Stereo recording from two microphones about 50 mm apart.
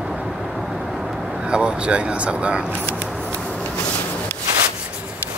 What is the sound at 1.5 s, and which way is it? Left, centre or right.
Speech, right.